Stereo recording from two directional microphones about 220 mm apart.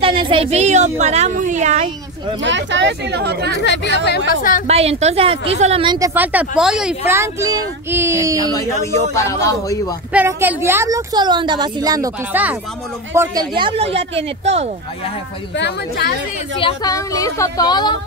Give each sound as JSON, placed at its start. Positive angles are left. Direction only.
{"t": 0.0, "sound": "a woman's voice", "side_deg": -25}
{"t": 2.4, "sound": "speech", "side_deg": -55}
{"t": 3.6, "sound": "speech", "side_deg": 50}
{"t": 4.4, "sound": "a woman's voice", "side_deg": 40}
{"t": 4.6, "sound": "a woman's voice", "side_deg": -30}
{"t": 8.9, "sound": "a woman's voice", "side_deg": 15}
{"t": 10.1, "sound": "a woman's voice", "side_deg": -10}
{"t": 15.5, "sound": "speech", "side_deg": 50}
{"t": 16.5, "sound": "a woman's voice", "side_deg": 20}